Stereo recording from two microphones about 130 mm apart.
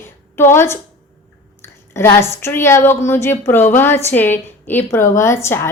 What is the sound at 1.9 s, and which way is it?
A woman's voice, 20° left (ahead or behind).